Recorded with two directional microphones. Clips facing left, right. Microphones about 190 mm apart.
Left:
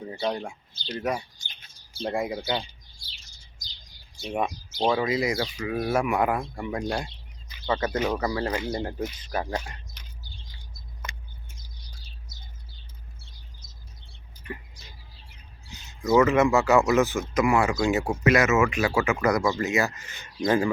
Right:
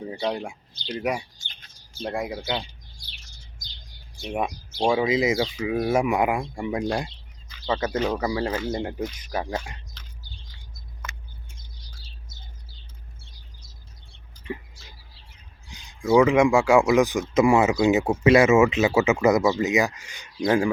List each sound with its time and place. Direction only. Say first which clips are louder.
0.1 s speech: right 1 dB; 15° right (ahead or behind); by 2.6 s centre (ahead or behind)
4.4 s speech: right 1 dB; 10° right (ahead or behind)
7.9 s speech: right 2 dB; 10° left (ahead or behind)
8.2 s speech: right 2 dB; 10° right (ahead or behind)
15.9 s speech: right 2 dB; 10° right (ahead or behind)
19.4 s speech: right 3 dB; 15° right (ahead or behind)